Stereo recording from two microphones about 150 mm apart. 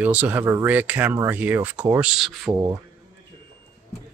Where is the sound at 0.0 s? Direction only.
10° right (ahead or behind).